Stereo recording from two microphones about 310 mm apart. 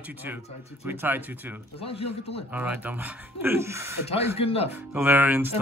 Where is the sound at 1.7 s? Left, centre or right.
Centre.